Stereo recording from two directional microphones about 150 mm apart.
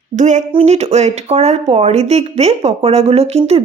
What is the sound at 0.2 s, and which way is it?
A woman's voice, 55° right (ahead or behind).